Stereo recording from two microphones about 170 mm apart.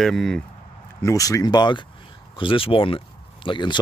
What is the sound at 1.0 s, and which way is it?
Speech, 20° left (ahead or behind).